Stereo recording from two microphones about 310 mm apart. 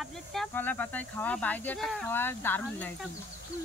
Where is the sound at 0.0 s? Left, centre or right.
Centre.